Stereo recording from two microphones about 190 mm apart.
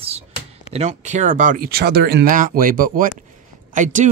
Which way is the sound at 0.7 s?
40° right (ahead or behind).